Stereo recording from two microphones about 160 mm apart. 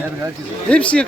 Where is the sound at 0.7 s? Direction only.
5° left (ahead or behind).